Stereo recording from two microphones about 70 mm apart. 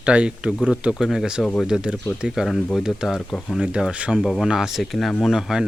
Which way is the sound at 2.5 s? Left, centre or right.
Centre.